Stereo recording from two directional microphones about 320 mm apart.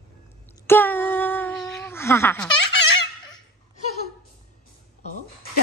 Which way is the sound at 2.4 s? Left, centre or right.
Left.